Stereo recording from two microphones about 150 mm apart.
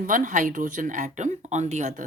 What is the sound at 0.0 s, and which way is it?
Speech, 60° right (ahead or behind).